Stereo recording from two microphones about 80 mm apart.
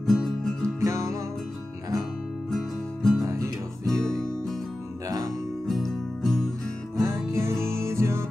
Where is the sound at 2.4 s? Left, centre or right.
Centre.